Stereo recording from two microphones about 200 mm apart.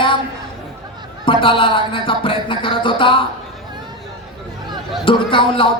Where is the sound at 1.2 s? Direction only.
25° left (ahead or behind).